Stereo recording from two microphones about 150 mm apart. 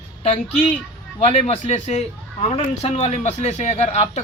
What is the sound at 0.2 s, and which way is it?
A woman's voice, 45° left (ahead or behind).